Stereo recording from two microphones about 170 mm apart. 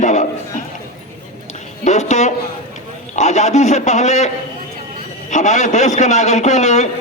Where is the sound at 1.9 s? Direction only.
45° left (ahead or behind).